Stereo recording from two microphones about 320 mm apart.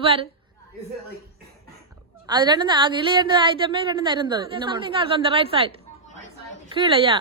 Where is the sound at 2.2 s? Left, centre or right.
Centre.